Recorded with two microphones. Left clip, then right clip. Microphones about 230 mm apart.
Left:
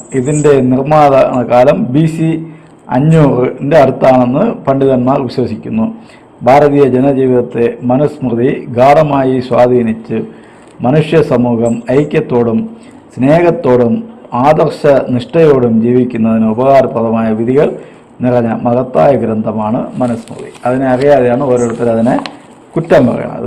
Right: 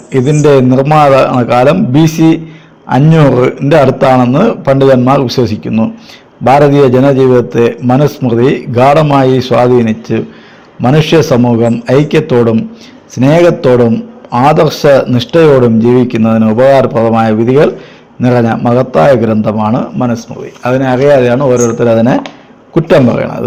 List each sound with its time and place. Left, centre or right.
0.1 s a man's voice: right